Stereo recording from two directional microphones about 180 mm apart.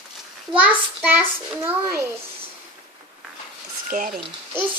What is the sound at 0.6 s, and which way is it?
A child's voice, 10° right (ahead or behind).